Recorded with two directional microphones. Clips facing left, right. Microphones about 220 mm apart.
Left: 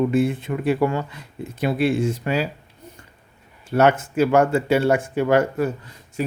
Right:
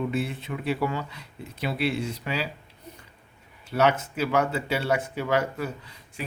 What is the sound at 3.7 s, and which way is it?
Speech, 50° left (ahead or behind).